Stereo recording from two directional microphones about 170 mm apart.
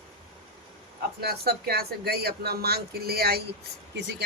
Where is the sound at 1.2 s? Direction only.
65° right (ahead or behind).